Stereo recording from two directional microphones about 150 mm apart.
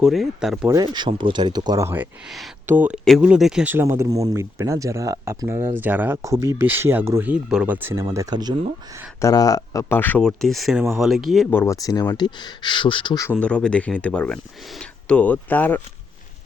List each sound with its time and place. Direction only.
0.0 s speech: centre (ahead or behind)
0.7 s speech: 30° right (ahead or behind)
9.2 s speech: 25° left (ahead or behind); by 11.4 s centre (ahead or behind)
11.5 s speech: 20° left (ahead or behind); by 13.1 s 35° left (ahead or behind)
13.3 s speech: 5° left (ahead or behind)